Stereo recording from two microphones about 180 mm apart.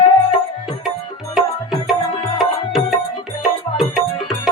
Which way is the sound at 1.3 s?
Centre (ahead or behind).